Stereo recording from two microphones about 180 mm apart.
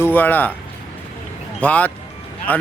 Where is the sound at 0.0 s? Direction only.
10° left (ahead or behind).